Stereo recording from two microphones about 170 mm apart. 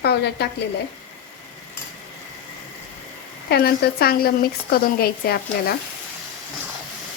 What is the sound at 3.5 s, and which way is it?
Speech, 65° left (ahead or behind).